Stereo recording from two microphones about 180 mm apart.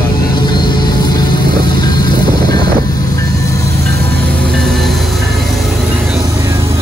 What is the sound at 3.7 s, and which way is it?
Music, 60° right (ahead or behind).